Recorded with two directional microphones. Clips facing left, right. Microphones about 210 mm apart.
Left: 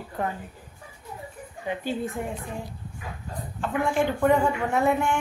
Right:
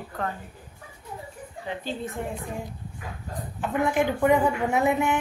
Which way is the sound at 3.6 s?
15° right (ahead or behind).